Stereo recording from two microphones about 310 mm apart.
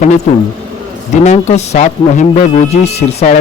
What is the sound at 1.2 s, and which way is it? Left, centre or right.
Speech, left.